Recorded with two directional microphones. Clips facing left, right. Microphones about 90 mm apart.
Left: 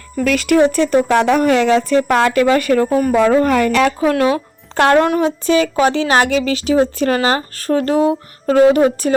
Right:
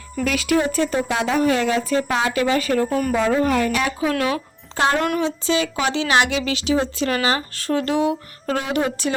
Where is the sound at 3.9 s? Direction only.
40° left (ahead or behind).